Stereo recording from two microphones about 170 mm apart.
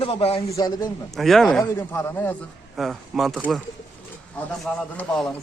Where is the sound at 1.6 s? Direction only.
15° left (ahead or behind).